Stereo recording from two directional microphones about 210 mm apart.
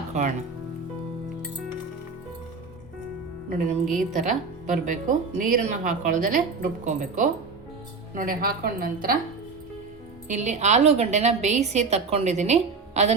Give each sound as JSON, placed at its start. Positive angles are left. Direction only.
{"t": 0.1, "sound": "speech", "side_deg": -35}
{"t": 4.1, "sound": "a woman's voice", "side_deg": -35}
{"t": 10.2, "sound": "speech", "side_deg": -35}